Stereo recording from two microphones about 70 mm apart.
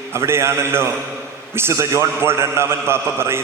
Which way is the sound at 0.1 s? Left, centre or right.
Right.